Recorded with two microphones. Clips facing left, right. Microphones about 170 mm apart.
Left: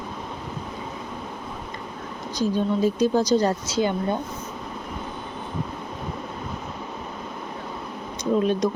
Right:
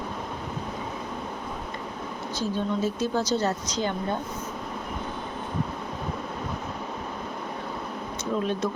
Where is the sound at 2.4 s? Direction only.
15° left (ahead or behind).